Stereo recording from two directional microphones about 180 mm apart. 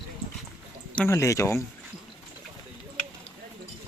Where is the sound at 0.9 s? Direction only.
15° left (ahead or behind).